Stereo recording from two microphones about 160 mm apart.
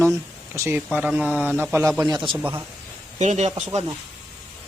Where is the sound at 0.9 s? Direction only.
5° right (ahead or behind).